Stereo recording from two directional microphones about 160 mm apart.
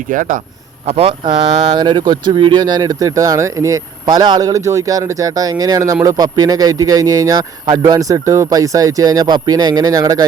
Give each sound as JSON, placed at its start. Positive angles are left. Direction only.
{"t": 0.1, "sound": "a man's voice", "side_deg": -55}
{"t": 0.9, "sound": "speech", "side_deg": -35}